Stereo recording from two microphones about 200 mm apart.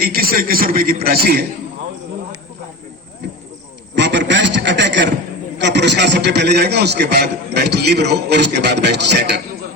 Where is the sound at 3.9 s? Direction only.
65° right (ahead or behind).